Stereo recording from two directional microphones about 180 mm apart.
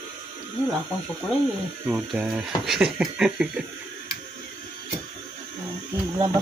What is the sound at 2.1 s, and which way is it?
Speech, centre (ahead or behind).